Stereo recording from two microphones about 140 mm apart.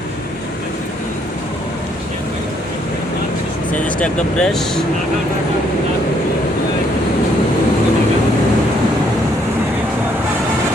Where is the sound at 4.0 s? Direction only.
5° left (ahead or behind).